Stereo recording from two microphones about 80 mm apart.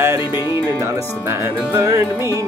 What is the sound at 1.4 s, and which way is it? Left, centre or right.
Speech, right.